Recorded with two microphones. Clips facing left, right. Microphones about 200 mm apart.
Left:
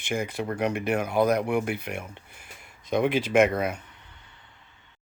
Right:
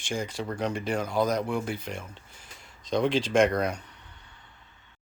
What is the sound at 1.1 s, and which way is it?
Speech, 60° left (ahead or behind).